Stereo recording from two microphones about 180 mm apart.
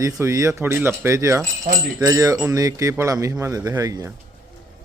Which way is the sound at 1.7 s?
45° right (ahead or behind).